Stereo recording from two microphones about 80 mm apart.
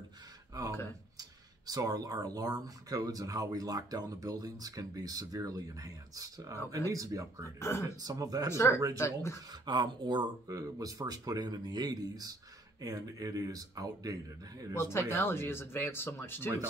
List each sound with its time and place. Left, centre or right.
1.7 s speech: right
7.4 s speech: left
8.0 s speech: right
8.5 s speech: left
9.5 s speech: right
10.5 s speech: right
14.7 s speech: left